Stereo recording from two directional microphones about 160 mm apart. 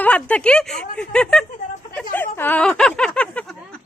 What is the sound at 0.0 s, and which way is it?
Speech, 10° left (ahead or behind).